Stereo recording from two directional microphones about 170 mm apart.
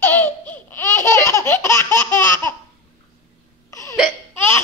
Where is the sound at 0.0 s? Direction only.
10° left (ahead or behind).